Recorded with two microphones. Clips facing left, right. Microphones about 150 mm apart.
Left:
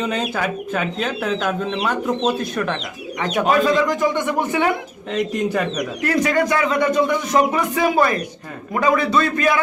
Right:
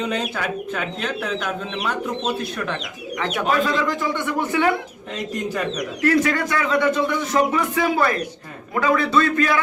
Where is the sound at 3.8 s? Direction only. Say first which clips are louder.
Left 4 dB; 15° left (ahead or behind).